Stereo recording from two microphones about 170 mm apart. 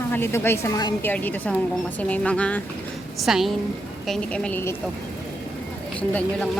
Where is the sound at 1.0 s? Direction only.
10° left (ahead or behind).